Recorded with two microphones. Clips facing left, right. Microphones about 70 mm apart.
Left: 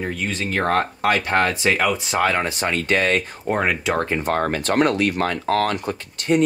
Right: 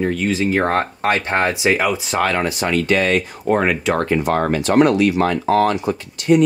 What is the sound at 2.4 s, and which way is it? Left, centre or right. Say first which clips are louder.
Speech: right 4 dB; left.